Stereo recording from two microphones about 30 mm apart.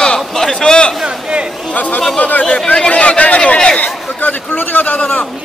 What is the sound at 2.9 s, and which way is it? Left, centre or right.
Speech, left.